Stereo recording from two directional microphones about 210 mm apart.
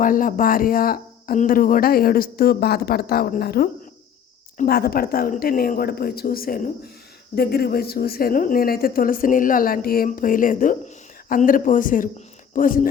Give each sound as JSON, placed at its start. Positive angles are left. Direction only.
{"t": 0.0, "sound": "a woman's voice", "side_deg": 40}